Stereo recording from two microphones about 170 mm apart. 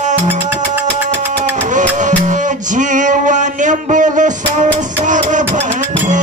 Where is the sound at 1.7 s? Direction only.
50° right (ahead or behind).